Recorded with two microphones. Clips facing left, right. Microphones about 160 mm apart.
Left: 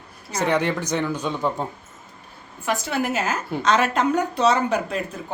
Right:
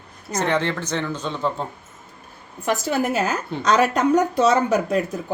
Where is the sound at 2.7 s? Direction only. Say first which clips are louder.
Right 3 dB; 40° right (ahead or behind).